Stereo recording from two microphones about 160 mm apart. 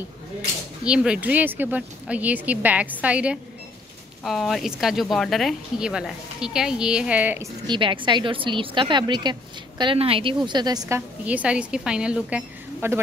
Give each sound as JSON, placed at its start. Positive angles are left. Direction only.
{"t": 0.8, "sound": "a woman's voice", "side_deg": -5}
{"t": 7.6, "sound": "a woman's voice", "side_deg": -30}
{"t": 11.0, "sound": "a woman's voice", "side_deg": -10}